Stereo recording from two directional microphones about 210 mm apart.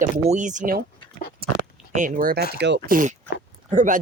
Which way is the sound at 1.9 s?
40° right (ahead or behind).